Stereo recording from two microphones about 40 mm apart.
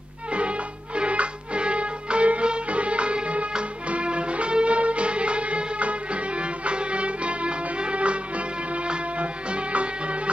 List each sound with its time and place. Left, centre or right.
0.3 s music: right